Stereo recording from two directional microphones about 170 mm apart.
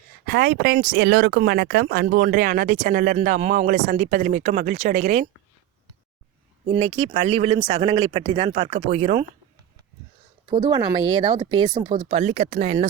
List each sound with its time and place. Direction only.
0.3 s speech: 65° right (ahead or behind); by 5.3 s 50° right (ahead or behind)
6.7 s speech: 35° right (ahead or behind)
10.5 s speech: 30° right (ahead or behind)